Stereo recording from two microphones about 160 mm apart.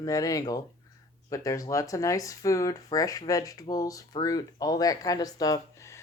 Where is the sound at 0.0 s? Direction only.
20° left (ahead or behind).